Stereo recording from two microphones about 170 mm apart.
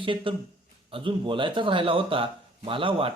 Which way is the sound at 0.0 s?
30° right (ahead or behind).